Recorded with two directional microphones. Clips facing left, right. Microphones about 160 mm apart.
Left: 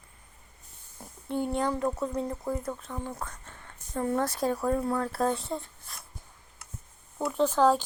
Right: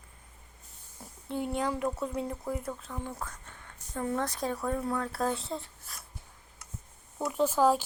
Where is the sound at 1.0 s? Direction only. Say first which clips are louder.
Left 3 dB; centre (ahead or behind).